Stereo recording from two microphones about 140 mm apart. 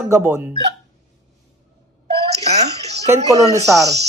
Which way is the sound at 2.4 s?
50° right (ahead or behind).